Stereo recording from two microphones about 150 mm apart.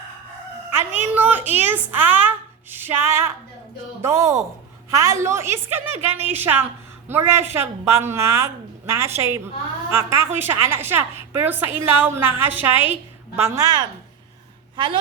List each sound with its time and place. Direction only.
0.7 s a woman's voice: 15° right (ahead or behind)
13.6 s speech: 25° right (ahead or behind)